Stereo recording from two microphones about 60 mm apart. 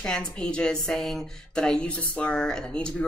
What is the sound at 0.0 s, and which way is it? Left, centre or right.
A woman's voice, centre.